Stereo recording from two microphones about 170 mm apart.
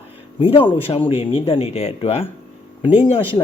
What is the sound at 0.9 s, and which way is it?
Speech, 35° left (ahead or behind).